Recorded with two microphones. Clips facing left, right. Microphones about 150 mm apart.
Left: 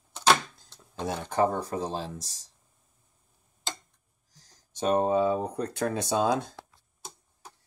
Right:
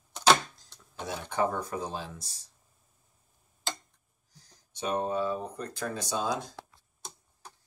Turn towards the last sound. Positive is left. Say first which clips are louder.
# left 6 dB
turn(degrees=55)  # may be behind; listen again after turning